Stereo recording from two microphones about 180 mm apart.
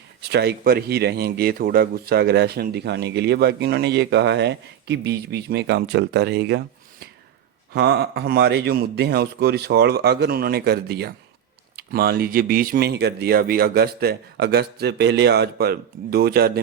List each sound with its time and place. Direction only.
0.2 s speech: 65° right (ahead or behind)
7.7 s speech: 65° right (ahead or behind)